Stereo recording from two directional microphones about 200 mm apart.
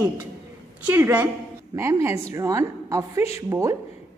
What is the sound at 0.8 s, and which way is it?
A woman's voice, 10° right (ahead or behind).